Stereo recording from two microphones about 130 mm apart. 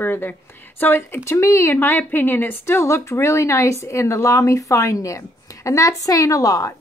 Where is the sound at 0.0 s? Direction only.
15° left (ahead or behind).